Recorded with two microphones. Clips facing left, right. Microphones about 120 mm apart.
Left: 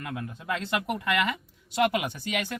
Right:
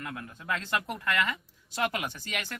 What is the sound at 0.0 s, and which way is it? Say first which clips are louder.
Speech: left 4 dB; 20° left (ahead or behind).